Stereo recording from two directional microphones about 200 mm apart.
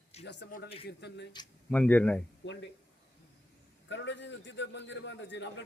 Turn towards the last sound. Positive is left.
turn(degrees=60)  # may be behind; listen again after turning